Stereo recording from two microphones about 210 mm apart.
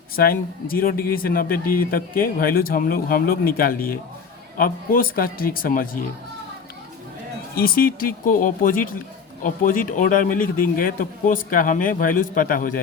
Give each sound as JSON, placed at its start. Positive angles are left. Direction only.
{"t": 0.2, "sound": "speech", "side_deg": 45}
{"t": 7.5, "sound": "a man's voice", "side_deg": 45}